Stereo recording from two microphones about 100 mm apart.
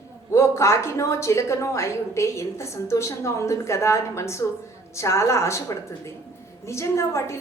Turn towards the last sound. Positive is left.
turn(degrees=30)  # may be behind; listen again after turning